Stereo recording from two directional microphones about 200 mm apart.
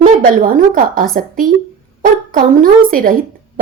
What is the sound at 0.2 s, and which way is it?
A woman's voice, 45° right (ahead or behind).